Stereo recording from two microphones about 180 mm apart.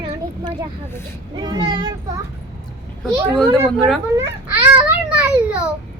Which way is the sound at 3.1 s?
5° left (ahead or behind).